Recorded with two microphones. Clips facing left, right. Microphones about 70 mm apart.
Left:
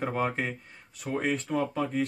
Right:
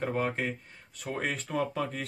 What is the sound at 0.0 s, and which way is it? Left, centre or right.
Speech, left.